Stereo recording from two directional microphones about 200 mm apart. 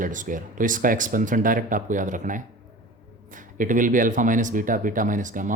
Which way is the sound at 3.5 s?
40° right (ahead or behind).